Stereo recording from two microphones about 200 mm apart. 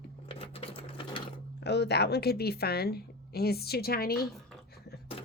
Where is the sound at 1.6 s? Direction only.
55° left (ahead or behind).